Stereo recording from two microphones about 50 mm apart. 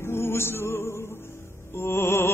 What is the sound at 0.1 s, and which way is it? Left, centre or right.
Music, left.